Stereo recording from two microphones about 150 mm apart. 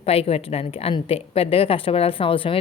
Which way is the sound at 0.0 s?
40° left (ahead or behind).